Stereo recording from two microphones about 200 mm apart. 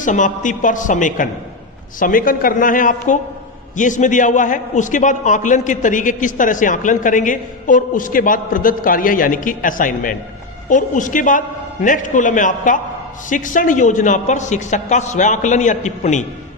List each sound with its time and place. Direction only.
0.0 s a man's voice: 40° left (ahead or behind)